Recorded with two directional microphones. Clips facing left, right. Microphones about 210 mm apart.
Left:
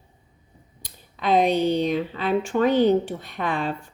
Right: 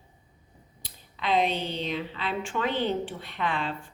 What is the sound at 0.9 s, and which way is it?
A woman's voice, 45° left (ahead or behind).